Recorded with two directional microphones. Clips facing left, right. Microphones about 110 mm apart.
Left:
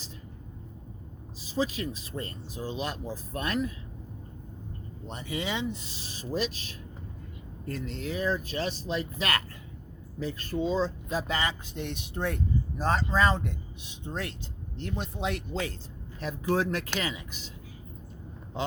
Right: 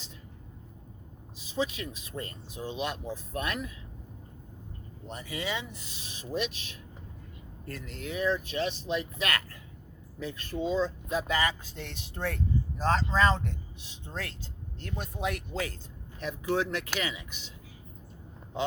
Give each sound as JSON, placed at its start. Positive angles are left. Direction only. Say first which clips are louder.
{"t": 1.4, "sound": "speech", "louder": "left 2 dB", "side_deg": 35}
{"t": 5.1, "sound": "speech", "louder": "left 2 dB", "side_deg": 25}
{"t": 7.7, "sound": "speech", "louder": "left 4 dB", "side_deg": 25}
{"t": 16.2, "sound": "speech", "louder": "left 2 dB", "side_deg": 40}